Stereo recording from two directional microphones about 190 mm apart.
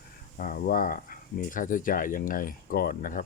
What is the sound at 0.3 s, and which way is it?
Speech, 50° left (ahead or behind).